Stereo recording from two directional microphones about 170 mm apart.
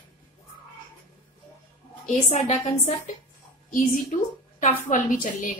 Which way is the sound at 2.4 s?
40° left (ahead or behind).